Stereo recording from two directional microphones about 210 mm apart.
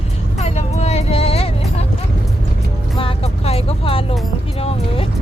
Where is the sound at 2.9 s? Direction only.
25° left (ahead or behind).